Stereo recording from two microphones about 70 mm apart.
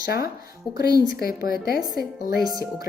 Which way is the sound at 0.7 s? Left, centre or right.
Right.